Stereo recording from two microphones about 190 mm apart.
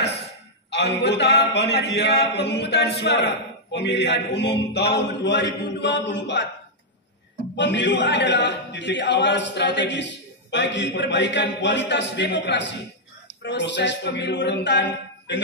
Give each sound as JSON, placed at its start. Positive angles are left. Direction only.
{"t": 0.7, "sound": "a man's voice", "side_deg": 65}
{"t": 7.5, "sound": "a man's voice", "side_deg": 65}